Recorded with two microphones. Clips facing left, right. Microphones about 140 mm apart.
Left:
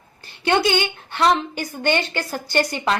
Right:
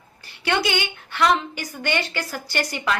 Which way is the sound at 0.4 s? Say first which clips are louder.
Left 4 dB; 30° left (ahead or behind).